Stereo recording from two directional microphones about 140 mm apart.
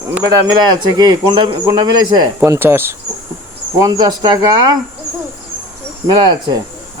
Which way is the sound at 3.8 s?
30° right (ahead or behind).